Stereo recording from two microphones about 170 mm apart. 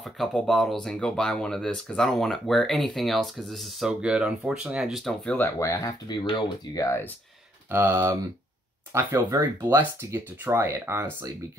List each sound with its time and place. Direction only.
0.0 s speech: centre (ahead or behind); by 7.1 s 20° left (ahead or behind)
7.7 s speech: 15° right (ahead or behind)